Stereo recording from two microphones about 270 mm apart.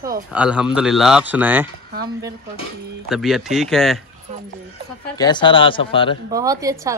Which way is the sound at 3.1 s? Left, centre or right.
Centre.